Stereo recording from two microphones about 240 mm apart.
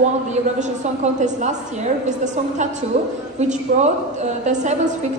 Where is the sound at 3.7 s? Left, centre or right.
Right.